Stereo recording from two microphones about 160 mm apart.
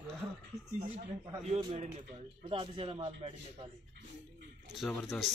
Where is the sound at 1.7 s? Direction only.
50° right (ahead or behind).